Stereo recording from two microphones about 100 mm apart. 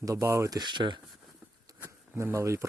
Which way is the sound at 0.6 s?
50° right (ahead or behind).